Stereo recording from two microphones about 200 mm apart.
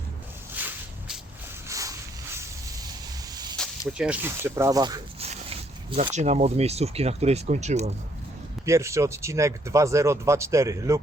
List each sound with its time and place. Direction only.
0.5 s a sound: 5° right (ahead or behind)
3.3 s snake: 20° right (ahead or behind)
3.6 s speech: 5° right (ahead or behind)
5.2 s dog: 30° right (ahead or behind)
6.1 s speech: 35° right (ahead or behind)
8.6 s speech: 15° right (ahead or behind)